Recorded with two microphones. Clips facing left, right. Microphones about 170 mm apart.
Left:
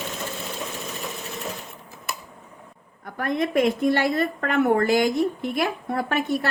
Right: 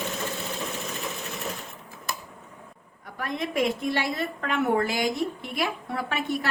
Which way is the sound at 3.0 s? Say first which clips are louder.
Left 6 dB; 50° left (ahead or behind).